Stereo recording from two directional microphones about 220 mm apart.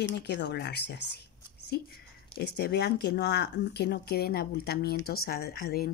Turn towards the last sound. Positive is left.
turn(degrees=45)  # may be behind; listen again after turning